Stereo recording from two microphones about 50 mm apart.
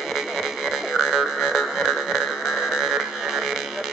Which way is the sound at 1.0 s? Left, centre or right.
Centre.